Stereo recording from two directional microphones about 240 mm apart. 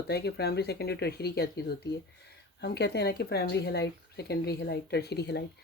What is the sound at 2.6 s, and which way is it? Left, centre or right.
Speech, left.